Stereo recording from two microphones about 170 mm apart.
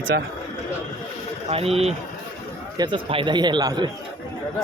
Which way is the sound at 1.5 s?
35° right (ahead or behind).